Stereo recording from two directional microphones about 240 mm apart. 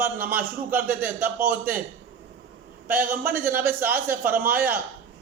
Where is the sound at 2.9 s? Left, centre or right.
Centre.